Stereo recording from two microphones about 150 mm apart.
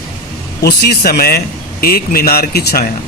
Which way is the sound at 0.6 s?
90° left.